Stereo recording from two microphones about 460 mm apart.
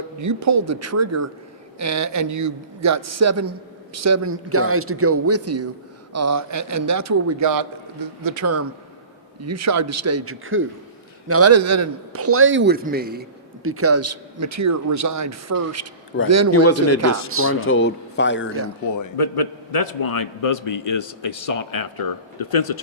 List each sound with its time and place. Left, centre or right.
0.2 s a man's voice: right
16.6 s a man's voice: left
18.9 s a man's voice: left